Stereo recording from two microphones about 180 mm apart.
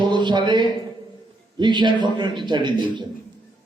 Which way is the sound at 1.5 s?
25° right (ahead or behind).